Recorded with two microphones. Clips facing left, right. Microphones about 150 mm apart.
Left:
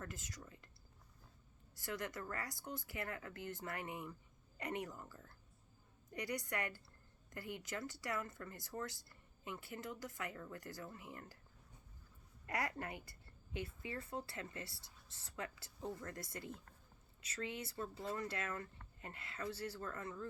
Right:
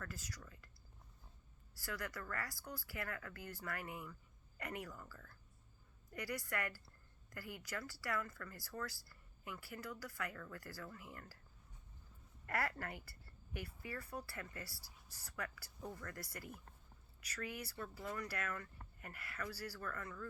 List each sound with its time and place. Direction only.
0.0 s speech: 20° left (ahead or behind)
1.7 s speech: 20° left (ahead or behind)
12.5 s speech: 20° left (ahead or behind)